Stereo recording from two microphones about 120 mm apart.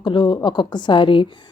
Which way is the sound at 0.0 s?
40° left (ahead or behind).